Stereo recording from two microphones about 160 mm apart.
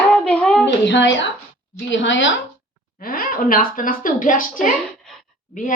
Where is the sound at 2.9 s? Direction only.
65° left (ahead or behind).